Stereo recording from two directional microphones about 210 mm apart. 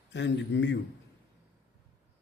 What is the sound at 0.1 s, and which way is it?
Speech, 55° left (ahead or behind).